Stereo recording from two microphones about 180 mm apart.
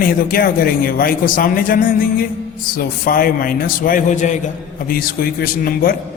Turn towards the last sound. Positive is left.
turn(degrees=55)  # may be behind; listen again after turning